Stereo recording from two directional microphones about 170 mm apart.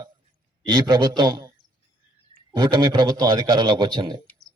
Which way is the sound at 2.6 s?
25° right (ahead or behind).